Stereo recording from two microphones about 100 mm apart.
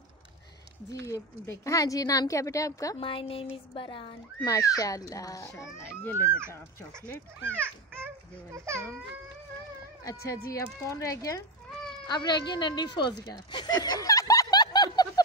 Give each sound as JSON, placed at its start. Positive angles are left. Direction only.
{"t": 0.9, "sound": "a woman's voice", "side_deg": 30}
{"t": 3.0, "sound": "speech", "side_deg": 60}
{"t": 4.5, "sound": "a woman's voice", "side_deg": 35}
{"t": 6.0, "sound": "speech", "side_deg": 20}
{"t": 7.4, "sound": "a child's voice", "side_deg": -20}
{"t": 10.0, "sound": "a woman's voice", "side_deg": 35}
{"t": 12.1, "sound": "a woman's voice", "side_deg": 45}